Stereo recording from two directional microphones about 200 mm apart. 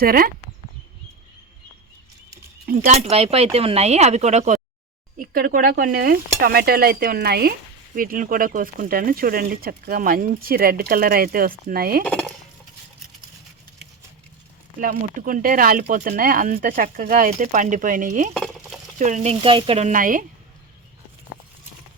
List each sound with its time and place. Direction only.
0.0 s speech: 45° right (ahead or behind)
2.6 s speech: 40° right (ahead or behind)
5.2 s speech: 45° right (ahead or behind)
12.0 s speech: 5° left (ahead or behind)
14.8 s speech: 45° right (ahead or behind)